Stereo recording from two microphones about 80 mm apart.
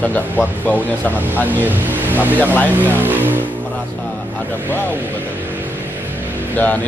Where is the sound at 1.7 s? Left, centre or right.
Right.